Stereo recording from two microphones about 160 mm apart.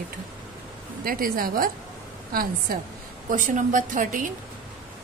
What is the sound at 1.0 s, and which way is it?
Speech, 65° right (ahead or behind).